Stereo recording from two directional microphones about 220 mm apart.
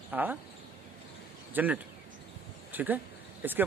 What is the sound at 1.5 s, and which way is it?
Speech, 5° right (ahead or behind).